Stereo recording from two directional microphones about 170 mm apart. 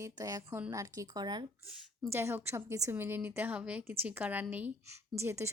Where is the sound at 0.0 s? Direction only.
20° right (ahead or behind).